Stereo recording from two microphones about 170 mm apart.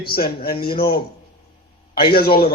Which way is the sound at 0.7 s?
65° left (ahead or behind).